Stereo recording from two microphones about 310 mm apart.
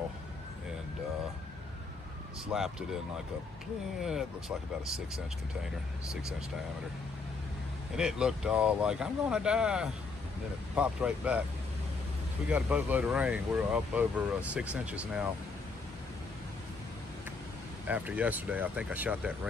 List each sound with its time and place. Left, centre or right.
2.5 s speech: centre
4.0 s speech: centre
7.9 s speech: centre
12.4 s speech: centre
17.8 s speech: centre